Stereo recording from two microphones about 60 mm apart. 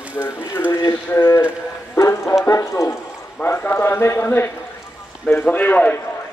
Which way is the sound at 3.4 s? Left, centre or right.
Left.